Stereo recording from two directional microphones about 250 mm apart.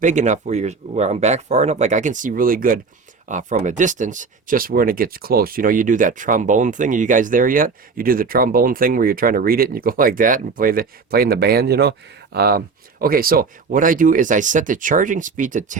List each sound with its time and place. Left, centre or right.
0.0 s speech: right